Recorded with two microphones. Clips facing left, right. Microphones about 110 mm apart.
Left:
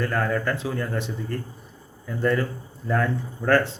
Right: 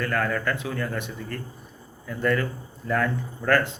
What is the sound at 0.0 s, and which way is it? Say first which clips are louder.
Speech: left 1 dB; 25° left (ahead or behind).